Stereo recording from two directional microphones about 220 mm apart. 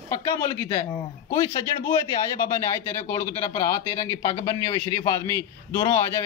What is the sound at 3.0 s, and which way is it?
A man's voice, 15° left (ahead or behind).